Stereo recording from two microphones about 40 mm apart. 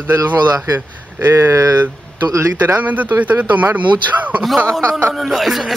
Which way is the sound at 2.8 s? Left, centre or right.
Right.